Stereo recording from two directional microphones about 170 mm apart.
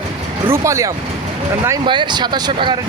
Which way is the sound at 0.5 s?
15° right (ahead or behind).